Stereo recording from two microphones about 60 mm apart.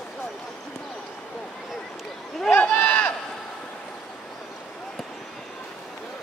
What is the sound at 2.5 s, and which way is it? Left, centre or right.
Sheep, left.